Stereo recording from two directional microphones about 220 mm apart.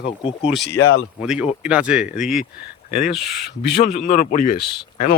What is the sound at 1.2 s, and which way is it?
Speech, 5° right (ahead or behind).